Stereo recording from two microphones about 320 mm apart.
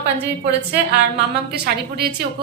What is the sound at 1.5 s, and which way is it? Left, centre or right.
Speech, right.